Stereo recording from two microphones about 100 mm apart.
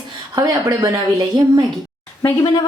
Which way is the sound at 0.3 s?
35° right (ahead or behind).